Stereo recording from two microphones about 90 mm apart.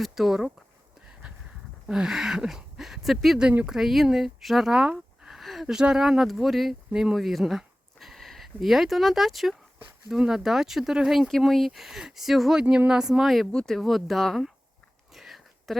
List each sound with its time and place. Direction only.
0.0 s speech: 5° right (ahead or behind)
1.9 s speech: 5° right (ahead or behind)
12.6 s speech: 15° right (ahead or behind)
15.1 s a sound: centre (ahead or behind)